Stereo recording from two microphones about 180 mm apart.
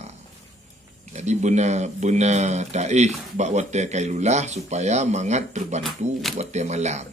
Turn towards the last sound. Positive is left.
turn(degrees=-40)  # may be behind; listen again after turning